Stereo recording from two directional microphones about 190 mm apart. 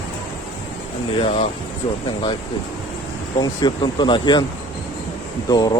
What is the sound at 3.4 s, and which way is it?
Speech, 25° left (ahead or behind).